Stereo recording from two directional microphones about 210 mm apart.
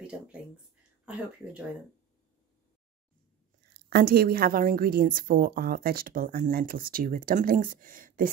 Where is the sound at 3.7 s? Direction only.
50° right (ahead or behind).